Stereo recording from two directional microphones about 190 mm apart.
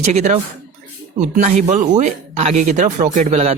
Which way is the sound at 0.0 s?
35° right (ahead or behind).